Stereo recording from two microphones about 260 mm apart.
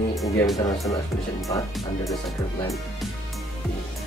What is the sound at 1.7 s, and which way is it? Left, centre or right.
Speech, centre.